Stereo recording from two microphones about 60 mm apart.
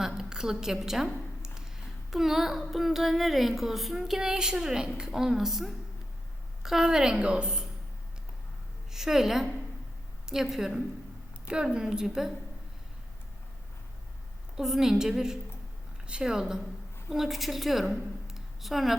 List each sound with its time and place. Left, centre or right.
0.0 s a sound: centre
2.0 s a woman's voice: centre
8.9 s a woman's voice: centre
14.5 s a woman's voice: centre